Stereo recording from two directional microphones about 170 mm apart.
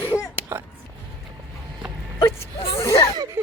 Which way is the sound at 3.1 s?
20° right (ahead or behind).